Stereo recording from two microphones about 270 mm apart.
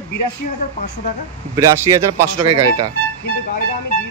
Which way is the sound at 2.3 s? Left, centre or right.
Right.